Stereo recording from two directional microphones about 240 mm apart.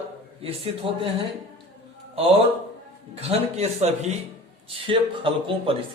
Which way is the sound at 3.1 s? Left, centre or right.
Right.